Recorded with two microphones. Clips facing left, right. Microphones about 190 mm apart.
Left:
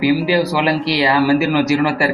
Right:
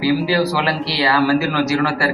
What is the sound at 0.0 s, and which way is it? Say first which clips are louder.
Speech: left 2 dB; 15° left (ahead or behind).